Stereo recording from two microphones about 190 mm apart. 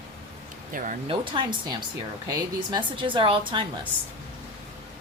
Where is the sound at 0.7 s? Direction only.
45° right (ahead or behind).